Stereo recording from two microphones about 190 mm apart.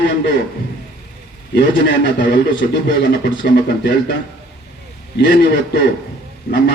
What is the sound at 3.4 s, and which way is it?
Speech, 65° left (ahead or behind).